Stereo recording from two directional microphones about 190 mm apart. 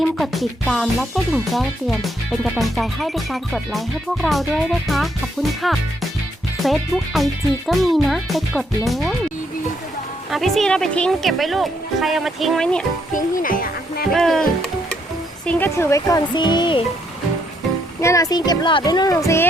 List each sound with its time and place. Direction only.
0.6 s speech: centre (ahead or behind)
10.3 s speech: centre (ahead or behind)
13.1 s speech: 45° left (ahead or behind)
14.1 s speech: centre (ahead or behind)
15.4 s speech: 10° left (ahead or behind)
18.0 s speech: 15° left (ahead or behind)